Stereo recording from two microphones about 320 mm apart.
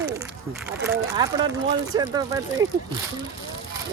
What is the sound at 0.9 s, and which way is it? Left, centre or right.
Speech, centre.